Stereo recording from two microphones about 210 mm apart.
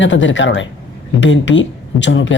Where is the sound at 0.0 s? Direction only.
65° left (ahead or behind).